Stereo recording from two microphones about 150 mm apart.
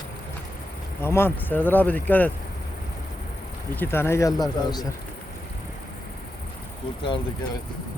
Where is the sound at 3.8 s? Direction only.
15° left (ahead or behind).